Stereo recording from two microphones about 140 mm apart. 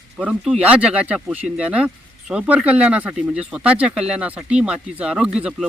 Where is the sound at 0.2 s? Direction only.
5° right (ahead or behind).